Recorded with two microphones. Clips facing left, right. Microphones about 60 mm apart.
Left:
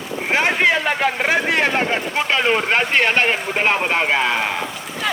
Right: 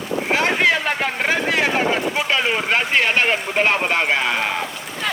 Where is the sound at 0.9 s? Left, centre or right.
Centre.